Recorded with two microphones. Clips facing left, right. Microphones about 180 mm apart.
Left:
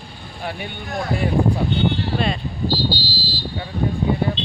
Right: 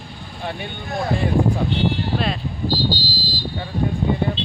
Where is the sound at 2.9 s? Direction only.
45° right (ahead or behind).